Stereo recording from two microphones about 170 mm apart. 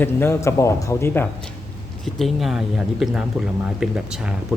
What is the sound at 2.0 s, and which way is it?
Speech, centre (ahead or behind).